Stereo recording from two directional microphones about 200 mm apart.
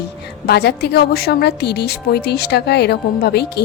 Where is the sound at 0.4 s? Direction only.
55° left (ahead or behind).